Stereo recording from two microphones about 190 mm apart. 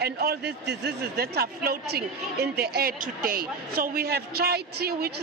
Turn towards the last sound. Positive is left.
turn(degrees=-55)  # may be behind; listen again after turning